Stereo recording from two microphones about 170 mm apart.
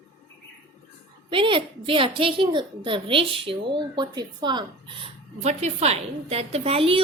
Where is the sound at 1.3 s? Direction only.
30° right (ahead or behind).